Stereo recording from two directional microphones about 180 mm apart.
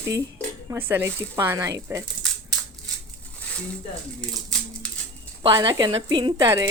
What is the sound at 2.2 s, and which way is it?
Crushing, centre (ahead or behind).